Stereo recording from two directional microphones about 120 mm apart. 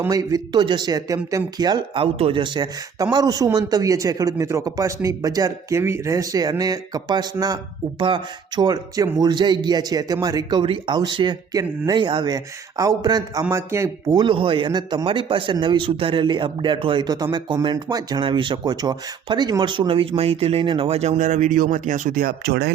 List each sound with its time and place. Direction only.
0.1 s speech: 30° right (ahead or behind)
13.5 s speech: 25° right (ahead or behind)
14.2 s speech: 45° right (ahead or behind); by 22.1 s 90° right